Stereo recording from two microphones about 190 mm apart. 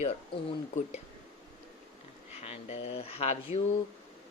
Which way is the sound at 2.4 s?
35° left (ahead or behind).